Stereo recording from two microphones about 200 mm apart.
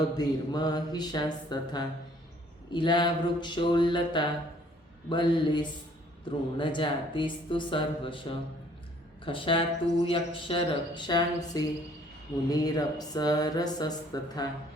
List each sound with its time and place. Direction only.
0.2 s speech: 20° left (ahead or behind)
6.6 s speech: 25° left (ahead or behind)